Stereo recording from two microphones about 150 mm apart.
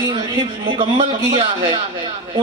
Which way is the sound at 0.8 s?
40° right (ahead or behind).